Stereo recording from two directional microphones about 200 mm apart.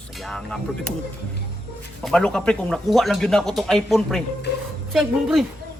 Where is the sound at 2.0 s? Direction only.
5° left (ahead or behind).